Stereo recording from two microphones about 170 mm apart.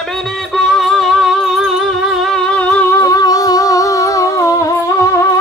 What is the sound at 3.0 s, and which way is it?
Music, 20° left (ahead or behind).